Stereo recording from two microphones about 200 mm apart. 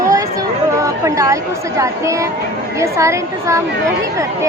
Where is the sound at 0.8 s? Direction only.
15° right (ahead or behind).